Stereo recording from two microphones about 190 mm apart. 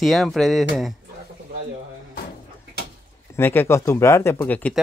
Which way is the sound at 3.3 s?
10° left (ahead or behind).